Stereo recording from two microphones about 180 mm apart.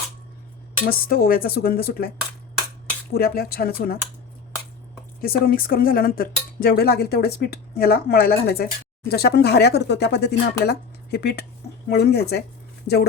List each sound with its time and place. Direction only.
0.9 s speech: 55° left (ahead or behind)
3.1 s speech: 55° left (ahead or behind)
5.2 s speech: 55° left (ahead or behind)